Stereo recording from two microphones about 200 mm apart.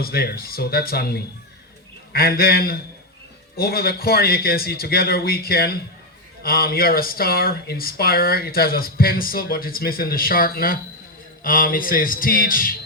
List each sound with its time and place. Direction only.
0.0 s speech: 50° left (ahead or behind)